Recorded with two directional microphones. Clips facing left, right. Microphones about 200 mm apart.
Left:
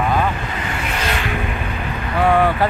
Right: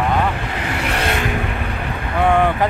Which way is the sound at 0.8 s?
65° right (ahead or behind).